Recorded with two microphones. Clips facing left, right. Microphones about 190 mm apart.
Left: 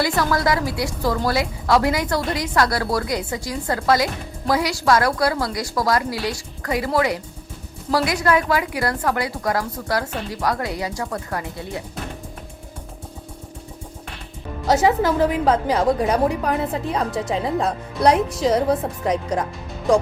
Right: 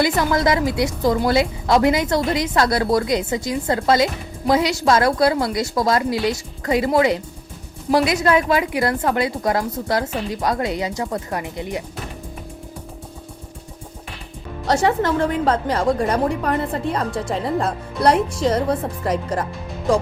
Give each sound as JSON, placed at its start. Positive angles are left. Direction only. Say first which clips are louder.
{"t": 0.0, "sound": "a woman's voice", "louder": "right 2 dB", "side_deg": -20}
{"t": 14.7, "sound": "a woman's voice", "louder": "left 1 dB", "side_deg": 0}